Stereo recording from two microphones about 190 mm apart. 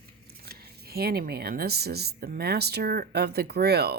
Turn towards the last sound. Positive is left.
turn(degrees=-60)  # may be behind; listen again after turning